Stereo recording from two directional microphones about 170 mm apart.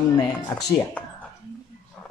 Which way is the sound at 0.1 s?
15° left (ahead or behind).